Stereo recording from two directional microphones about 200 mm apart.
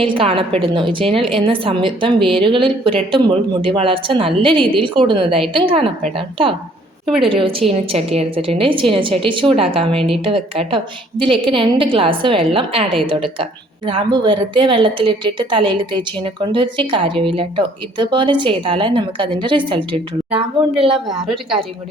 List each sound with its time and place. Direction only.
0.0 s speech: 25° right (ahead or behind)
7.2 s speech: 25° right (ahead or behind)